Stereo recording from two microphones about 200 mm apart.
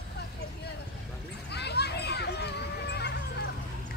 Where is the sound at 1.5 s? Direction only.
55° left (ahead or behind).